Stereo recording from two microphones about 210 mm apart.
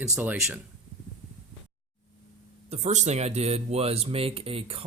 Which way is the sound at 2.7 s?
35° right (ahead or behind).